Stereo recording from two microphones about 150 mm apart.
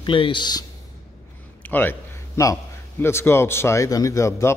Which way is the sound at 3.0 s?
15° left (ahead or behind).